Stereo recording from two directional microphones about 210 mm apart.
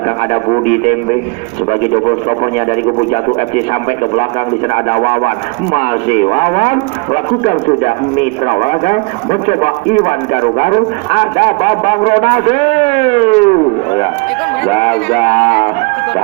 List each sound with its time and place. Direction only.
0.5 s speech: 35° left (ahead or behind)
4.7 s speech: 30° left (ahead or behind)